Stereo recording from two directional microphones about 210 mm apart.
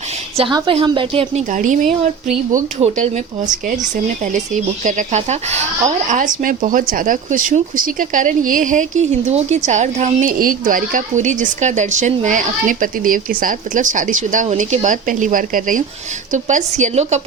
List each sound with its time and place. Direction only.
0.3 s a woman's voice: 20° right (ahead or behind)